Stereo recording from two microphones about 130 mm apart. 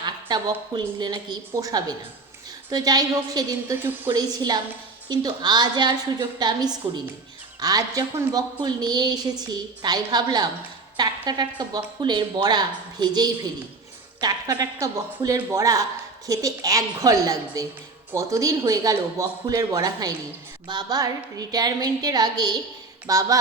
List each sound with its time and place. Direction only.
0.0 s a woman's voice: 30° right (ahead or behind)